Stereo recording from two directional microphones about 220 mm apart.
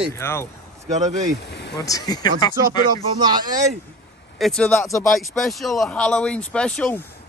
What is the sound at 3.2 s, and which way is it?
Speech, 20° right (ahead or behind).